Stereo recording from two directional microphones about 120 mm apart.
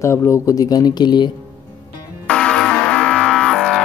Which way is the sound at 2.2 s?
5° left (ahead or behind).